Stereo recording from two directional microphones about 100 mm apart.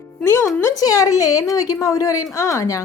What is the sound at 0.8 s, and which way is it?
Speech, 35° left (ahead or behind).